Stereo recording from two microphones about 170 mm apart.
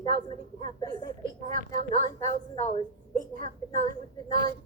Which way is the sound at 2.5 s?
30° left (ahead or behind).